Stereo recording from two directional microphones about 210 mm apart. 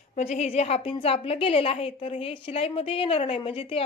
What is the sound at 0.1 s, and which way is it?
A woman's voice, 30° left (ahead or behind).